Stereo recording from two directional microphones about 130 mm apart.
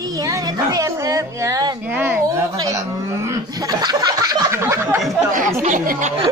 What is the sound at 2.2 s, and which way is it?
Speech, 25° right (ahead or behind).